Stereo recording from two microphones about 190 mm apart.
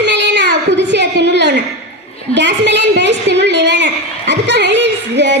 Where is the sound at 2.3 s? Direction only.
65° right (ahead or behind).